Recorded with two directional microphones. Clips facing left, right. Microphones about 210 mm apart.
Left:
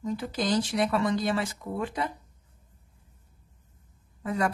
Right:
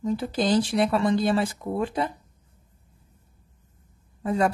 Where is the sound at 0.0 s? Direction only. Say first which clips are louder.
Right 5 dB; 30° right (ahead or behind).